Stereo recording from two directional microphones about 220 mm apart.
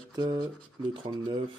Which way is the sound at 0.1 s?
20° right (ahead or behind).